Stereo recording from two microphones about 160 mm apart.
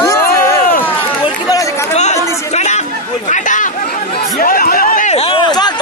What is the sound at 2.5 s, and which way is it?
Chatter, 45° left (ahead or behind).